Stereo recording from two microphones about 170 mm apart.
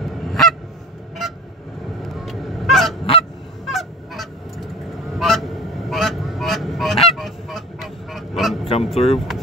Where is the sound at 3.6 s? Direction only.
Centre (ahead or behind).